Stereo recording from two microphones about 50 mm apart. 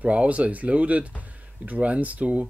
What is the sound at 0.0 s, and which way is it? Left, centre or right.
Speech, right.